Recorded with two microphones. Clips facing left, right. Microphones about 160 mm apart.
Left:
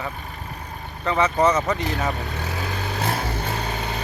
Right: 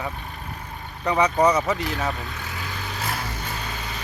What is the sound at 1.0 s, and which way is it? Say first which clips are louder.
Speech: even; 15° right (ahead or behind).